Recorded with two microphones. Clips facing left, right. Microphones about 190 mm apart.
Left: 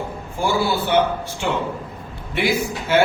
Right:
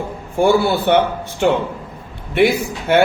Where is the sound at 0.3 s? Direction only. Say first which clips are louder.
Right 7 dB; 60° right (ahead or behind).